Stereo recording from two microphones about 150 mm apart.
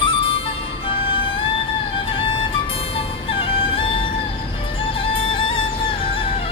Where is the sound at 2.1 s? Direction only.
35° left (ahead or behind).